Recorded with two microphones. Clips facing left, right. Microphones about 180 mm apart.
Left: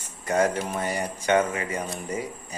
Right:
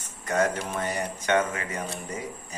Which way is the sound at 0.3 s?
10° left (ahead or behind).